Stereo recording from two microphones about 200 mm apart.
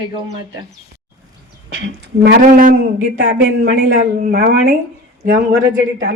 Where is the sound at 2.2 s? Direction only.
50° right (ahead or behind).